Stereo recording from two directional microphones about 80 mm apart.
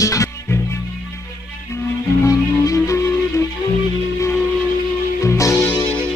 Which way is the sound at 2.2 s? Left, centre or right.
Left.